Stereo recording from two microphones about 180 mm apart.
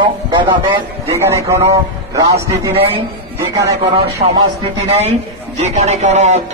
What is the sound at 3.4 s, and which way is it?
Speech, 20° right (ahead or behind).